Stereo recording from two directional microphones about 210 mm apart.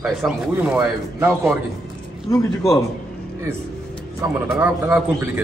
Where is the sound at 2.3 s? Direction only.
15° left (ahead or behind).